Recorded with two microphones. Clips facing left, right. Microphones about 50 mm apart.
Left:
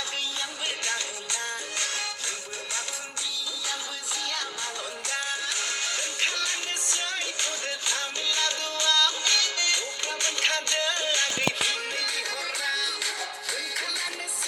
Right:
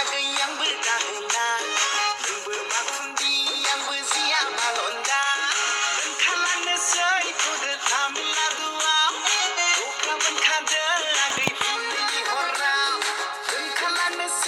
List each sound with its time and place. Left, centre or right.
0.6 s music: right
2.7 s music: right
5.0 s music: right